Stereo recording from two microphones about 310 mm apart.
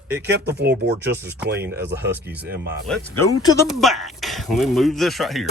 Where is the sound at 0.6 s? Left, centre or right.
Right.